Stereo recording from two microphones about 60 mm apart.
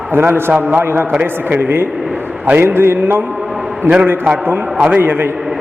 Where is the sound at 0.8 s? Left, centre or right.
Right.